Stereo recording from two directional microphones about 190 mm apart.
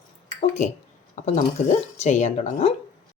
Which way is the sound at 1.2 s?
40° left (ahead or behind).